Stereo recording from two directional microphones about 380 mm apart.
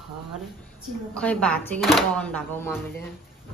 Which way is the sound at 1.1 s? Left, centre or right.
Centre.